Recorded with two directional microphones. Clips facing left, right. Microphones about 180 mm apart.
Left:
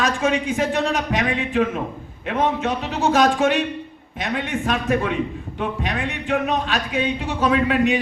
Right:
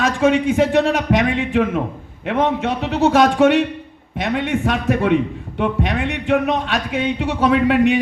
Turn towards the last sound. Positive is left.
turn(degrees=-65)  # may be behind; listen again after turning